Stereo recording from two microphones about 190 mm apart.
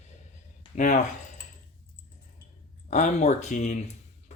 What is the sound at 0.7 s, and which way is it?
Speech, 40° left (ahead or behind).